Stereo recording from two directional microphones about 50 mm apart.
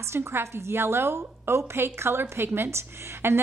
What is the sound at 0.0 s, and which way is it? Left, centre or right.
A woman's voice, right.